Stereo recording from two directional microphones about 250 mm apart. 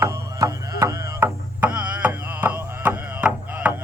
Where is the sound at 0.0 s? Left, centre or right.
Centre.